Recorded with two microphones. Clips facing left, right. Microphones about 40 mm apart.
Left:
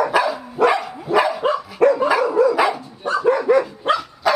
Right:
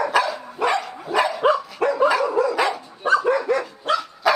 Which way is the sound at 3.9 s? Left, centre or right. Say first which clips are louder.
Even; left.